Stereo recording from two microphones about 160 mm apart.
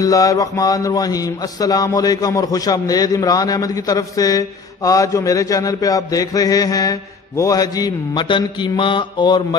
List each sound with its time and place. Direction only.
0.0 s a man's voice: 20° left (ahead or behind)